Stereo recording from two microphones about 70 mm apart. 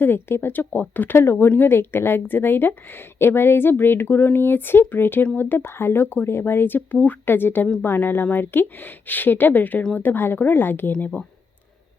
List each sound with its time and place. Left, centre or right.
0.0 s speech: left